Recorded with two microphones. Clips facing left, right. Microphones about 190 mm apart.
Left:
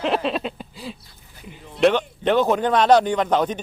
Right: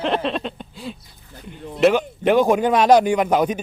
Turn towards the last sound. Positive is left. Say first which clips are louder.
# right 2 dB
turn(degrees=-10)  # may be behind; listen again after turning